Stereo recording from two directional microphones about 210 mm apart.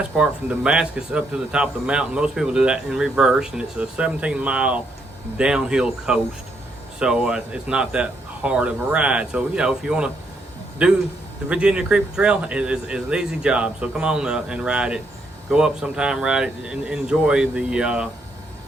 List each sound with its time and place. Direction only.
0.2 s a man's voice: 5° right (ahead or behind)